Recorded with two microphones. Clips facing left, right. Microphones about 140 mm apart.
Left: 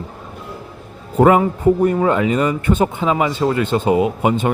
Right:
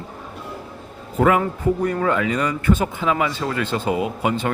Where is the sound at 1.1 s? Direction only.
25° left (ahead or behind).